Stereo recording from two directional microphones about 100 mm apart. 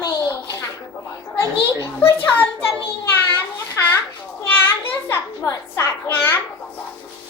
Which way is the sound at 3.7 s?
25° left (ahead or behind).